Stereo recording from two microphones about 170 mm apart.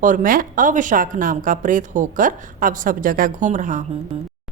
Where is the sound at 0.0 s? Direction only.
50° right (ahead or behind).